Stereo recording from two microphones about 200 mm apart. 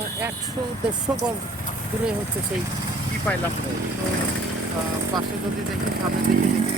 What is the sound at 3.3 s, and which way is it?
Speech, 5° left (ahead or behind).